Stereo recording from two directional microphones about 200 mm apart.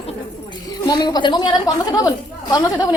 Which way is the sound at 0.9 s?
20° left (ahead or behind).